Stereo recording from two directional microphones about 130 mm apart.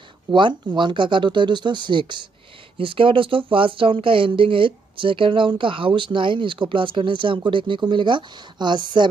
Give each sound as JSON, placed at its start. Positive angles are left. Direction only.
{"t": 0.3, "sound": "speech", "side_deg": -35}